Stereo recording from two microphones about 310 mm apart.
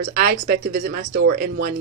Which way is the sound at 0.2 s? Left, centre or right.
Right.